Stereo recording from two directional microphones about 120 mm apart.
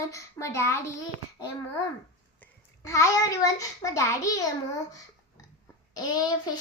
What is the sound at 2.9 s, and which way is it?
A woman's voice, 25° left (ahead or behind).